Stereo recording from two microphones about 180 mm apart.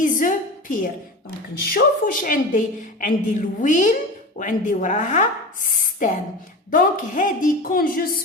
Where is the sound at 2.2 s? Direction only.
50° left (ahead or behind).